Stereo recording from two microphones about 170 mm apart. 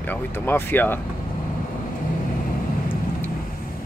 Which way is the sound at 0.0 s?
10° left (ahead or behind).